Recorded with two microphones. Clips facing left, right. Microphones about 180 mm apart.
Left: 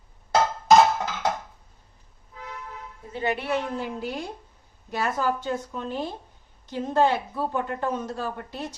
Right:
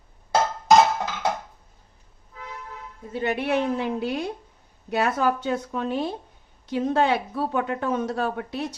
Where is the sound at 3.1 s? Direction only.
60° right (ahead or behind).